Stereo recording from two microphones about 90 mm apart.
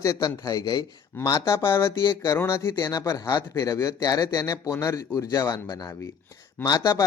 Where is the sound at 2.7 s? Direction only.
45° left (ahead or behind).